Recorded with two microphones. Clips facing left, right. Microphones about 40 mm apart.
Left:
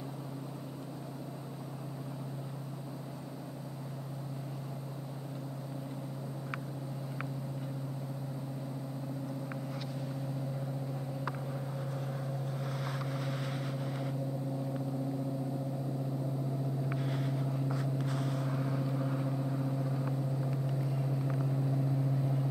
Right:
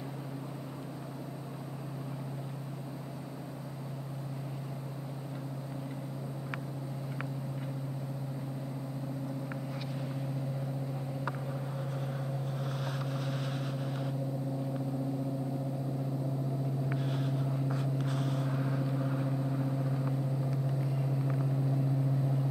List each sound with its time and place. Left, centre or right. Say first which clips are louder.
12.1 s vehicle: right 1 dB; centre
12.9 s vehicle: right 1 dB; centre
17.0 s vehicle: right 1 dB; centre